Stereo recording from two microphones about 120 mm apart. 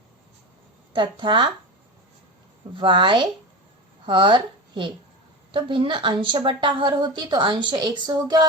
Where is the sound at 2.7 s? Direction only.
40° right (ahead or behind).